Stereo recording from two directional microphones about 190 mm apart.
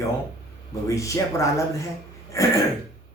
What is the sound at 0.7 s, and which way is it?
Speech, 15° left (ahead or behind).